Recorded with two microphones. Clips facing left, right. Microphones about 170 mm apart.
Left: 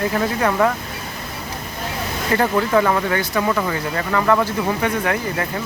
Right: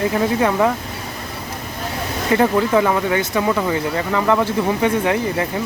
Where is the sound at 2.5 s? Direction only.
15° right (ahead or behind).